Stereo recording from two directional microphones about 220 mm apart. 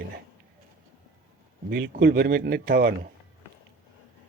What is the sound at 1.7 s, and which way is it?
Speech, 45° right (ahead or behind).